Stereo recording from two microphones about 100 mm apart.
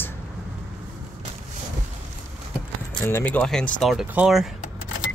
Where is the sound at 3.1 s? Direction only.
20° left (ahead or behind).